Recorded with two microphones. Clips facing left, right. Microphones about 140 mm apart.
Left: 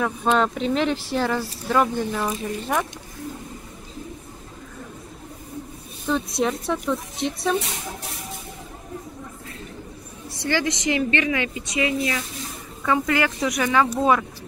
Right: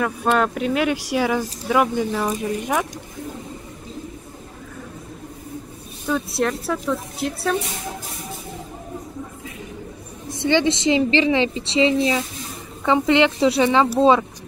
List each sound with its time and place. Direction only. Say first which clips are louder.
0.4 s speech: right 1 dB; 5° right (ahead or behind)
6.0 s speech: right 1 dB; 5° right (ahead or behind)
10.3 s a woman's voice: right 6 dB; 20° right (ahead or behind)